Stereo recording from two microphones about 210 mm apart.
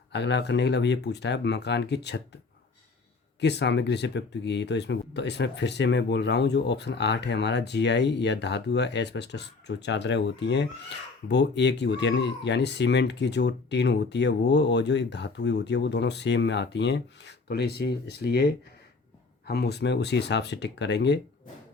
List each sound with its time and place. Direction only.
0.1 s speech: 55° left (ahead or behind)
3.4 s speech: 55° left (ahead or behind)